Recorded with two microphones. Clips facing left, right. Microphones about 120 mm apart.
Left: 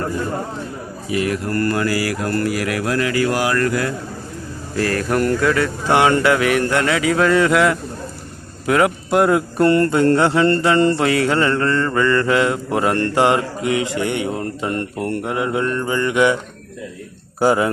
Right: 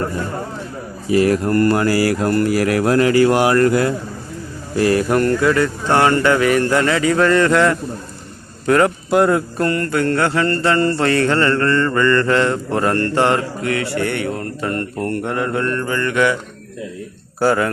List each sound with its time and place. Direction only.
1.1 s speech: 35° right (ahead or behind)
1.5 s speech: 25° right (ahead or behind)
4.8 s speech: 15° right (ahead or behind)
5.2 s speech: centre (ahead or behind)
9.6 s mantra: 25° left (ahead or behind)
17.4 s mantra: 15° left (ahead or behind)